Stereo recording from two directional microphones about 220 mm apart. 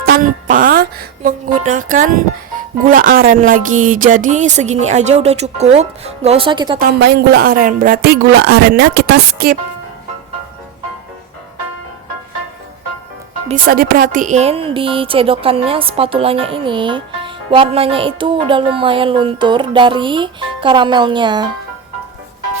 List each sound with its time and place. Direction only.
0.0 s speech: 40° right (ahead or behind); by 6.7 s 20° right (ahead or behind)
6.7 s speech: 45° right (ahead or behind)
13.5 s a woman's voice: 40° right (ahead or behind); by 21.4 s 20° right (ahead or behind)